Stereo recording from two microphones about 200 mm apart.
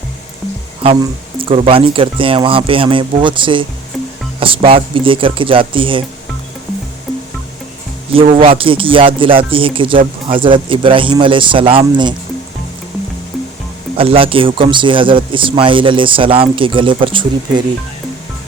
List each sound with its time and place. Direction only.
0.8 s speech: 30° right (ahead or behind)
7.1 s music: centre (ahead or behind)
8.1 s speech: 30° right (ahead or behind)
13.9 s speech: 30° right (ahead or behind)